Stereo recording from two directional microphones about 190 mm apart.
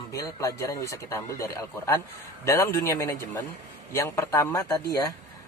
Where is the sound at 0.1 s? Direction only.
15° left (ahead or behind).